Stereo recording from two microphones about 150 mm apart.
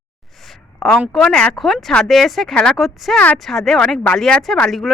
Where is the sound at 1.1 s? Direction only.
5° left (ahead or behind).